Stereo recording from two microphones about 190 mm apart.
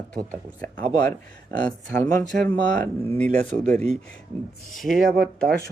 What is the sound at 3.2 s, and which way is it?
Speech, 35° right (ahead or behind).